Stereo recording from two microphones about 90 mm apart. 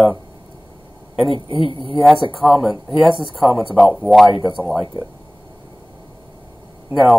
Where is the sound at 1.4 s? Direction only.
65° left (ahead or behind).